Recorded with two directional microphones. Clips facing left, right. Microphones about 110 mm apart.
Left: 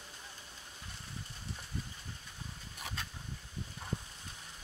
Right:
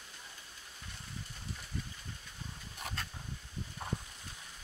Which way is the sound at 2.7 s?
Centre (ahead or behind).